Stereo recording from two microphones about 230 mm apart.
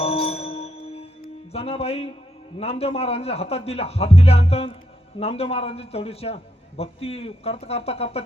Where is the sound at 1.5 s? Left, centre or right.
Left.